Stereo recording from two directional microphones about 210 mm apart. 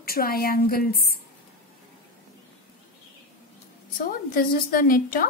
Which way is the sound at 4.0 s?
40° left (ahead or behind).